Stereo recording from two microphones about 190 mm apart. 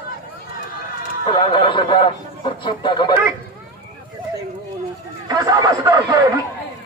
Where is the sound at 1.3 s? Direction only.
25° left (ahead or behind).